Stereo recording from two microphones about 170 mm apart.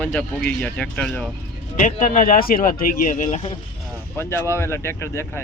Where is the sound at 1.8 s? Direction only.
50° left (ahead or behind).